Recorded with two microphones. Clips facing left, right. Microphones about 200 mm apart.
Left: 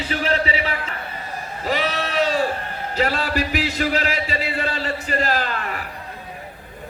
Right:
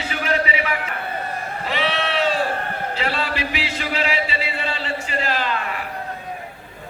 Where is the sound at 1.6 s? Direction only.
40° left (ahead or behind).